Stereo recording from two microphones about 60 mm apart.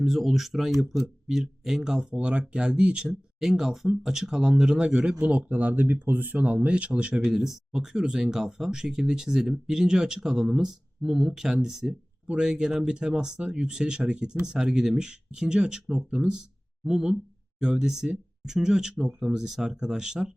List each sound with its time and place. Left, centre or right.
0.0 s speech: centre; by 6.3 s right
6.3 s speech: right
7.3 s speech: centre